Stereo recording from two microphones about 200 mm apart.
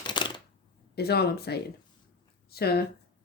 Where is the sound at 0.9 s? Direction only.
55° left (ahead or behind).